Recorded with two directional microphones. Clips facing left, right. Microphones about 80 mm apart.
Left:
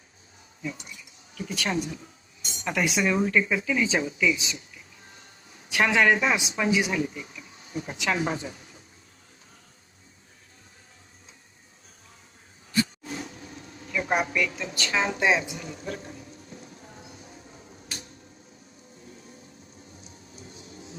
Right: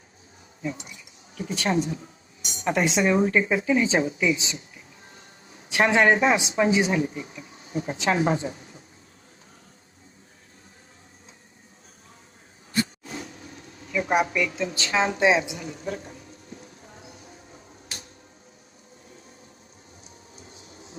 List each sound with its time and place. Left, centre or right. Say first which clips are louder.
0.6 s speech: right 3 dB; right
13.9 s a woman's voice: right 3 dB; centre